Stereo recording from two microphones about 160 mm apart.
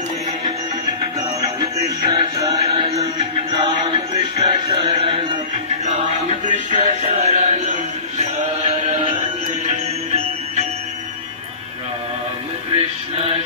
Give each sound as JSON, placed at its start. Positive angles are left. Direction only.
{"t": 1.6, "sound": "music", "side_deg": -30}
{"t": 4.4, "sound": "music", "side_deg": -35}
{"t": 6.7, "sound": "music", "side_deg": -50}
{"t": 12.7, "sound": "music", "side_deg": -35}